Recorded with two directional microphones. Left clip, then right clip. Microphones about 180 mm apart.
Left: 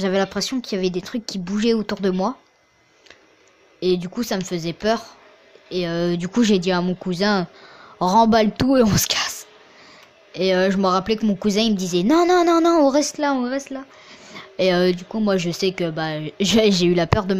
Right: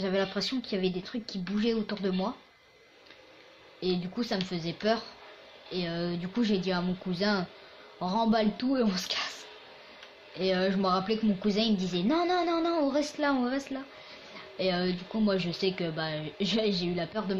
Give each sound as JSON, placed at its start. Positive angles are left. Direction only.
{"t": 0.0, "sound": "a woman's voice", "side_deg": 55}
{"t": 3.8, "sound": "a woman's voice", "side_deg": 60}
{"t": 8.0, "sound": "a woman's voice", "side_deg": 60}
{"t": 10.3, "sound": "a woman's voice", "side_deg": 60}